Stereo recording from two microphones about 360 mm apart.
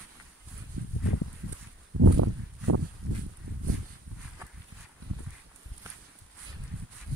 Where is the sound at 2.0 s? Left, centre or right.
Right.